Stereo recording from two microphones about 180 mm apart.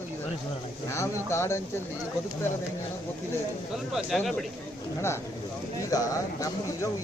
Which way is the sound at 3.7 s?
Centre (ahead or behind).